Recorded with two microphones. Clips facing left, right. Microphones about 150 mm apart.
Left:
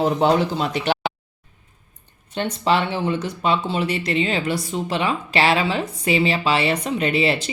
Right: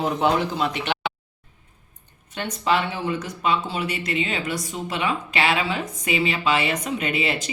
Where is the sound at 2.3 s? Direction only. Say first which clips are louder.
Left 3 dB; 30° left (ahead or behind).